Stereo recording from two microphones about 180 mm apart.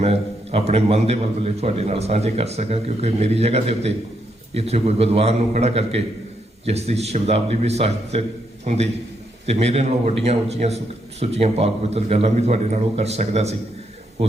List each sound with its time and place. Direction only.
0.0 s a man's voice: 35° right (ahead or behind)